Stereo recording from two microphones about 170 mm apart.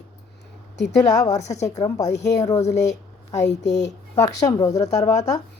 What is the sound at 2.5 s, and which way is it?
Speech, 40° left (ahead or behind).